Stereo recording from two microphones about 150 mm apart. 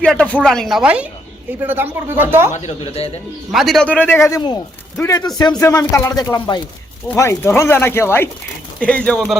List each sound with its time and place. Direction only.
0.0 s speech: 5° left (ahead or behind); by 2.5 s 15° right (ahead or behind)
2.5 s speech: 50° left (ahead or behind)
3.5 s speech: centre (ahead or behind); by 6.6 s 30° left (ahead or behind)
7.2 s speech: 15° left (ahead or behind)